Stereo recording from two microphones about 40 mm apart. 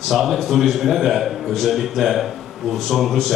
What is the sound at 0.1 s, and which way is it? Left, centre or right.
A man's voice, centre.